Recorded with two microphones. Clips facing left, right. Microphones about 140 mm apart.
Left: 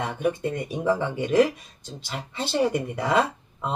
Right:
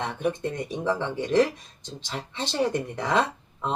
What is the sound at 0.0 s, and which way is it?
Speech, 5° left (ahead or behind).